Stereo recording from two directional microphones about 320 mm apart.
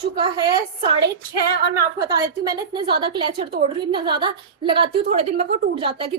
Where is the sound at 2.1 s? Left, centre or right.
Centre.